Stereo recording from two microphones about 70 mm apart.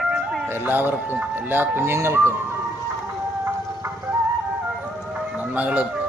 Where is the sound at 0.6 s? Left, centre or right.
Right.